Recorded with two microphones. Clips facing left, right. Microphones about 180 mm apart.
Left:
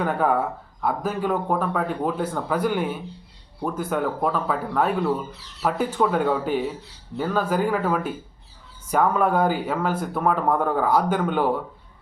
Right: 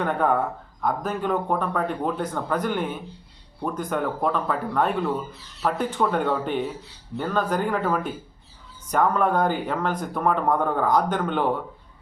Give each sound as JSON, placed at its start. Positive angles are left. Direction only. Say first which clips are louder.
{"t": 0.0, "sound": "speech", "louder": "left 1 dB", "side_deg": 5}